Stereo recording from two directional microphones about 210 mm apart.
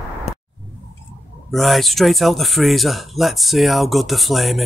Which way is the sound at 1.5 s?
Centre (ahead or behind).